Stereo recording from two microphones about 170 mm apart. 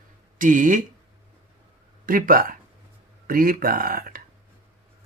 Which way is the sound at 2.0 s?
55° right (ahead or behind).